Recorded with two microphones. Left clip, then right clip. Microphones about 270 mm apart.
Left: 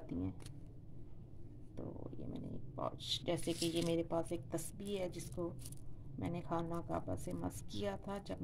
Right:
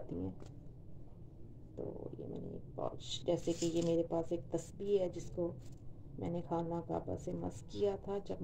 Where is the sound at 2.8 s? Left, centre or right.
Left.